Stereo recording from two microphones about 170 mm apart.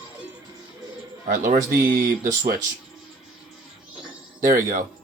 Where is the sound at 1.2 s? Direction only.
50° right (ahead or behind).